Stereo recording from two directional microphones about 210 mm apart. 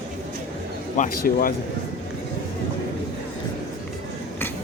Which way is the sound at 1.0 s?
45° left (ahead or behind).